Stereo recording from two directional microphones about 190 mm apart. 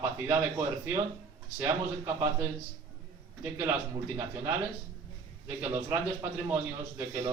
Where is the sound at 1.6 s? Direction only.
15° right (ahead or behind).